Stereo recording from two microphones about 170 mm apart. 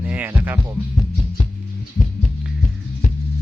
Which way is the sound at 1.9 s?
45° left (ahead or behind).